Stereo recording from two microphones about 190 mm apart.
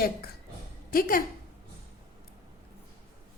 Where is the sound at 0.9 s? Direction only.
50° left (ahead or behind).